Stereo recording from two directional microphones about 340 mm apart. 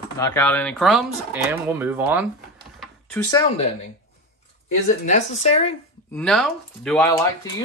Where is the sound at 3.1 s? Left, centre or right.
Centre.